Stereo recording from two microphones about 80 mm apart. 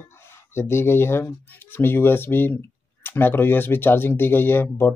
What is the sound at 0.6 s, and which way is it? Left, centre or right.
Speech, left.